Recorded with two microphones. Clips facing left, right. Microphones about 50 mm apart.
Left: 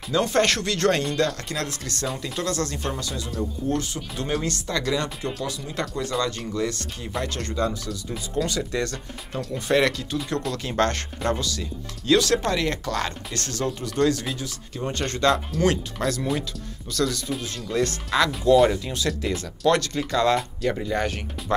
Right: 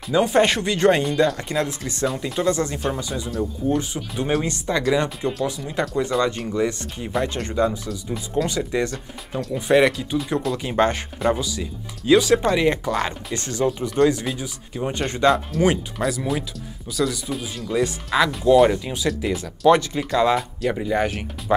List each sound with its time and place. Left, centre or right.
0.1 s speech: centre
8.9 s speech: centre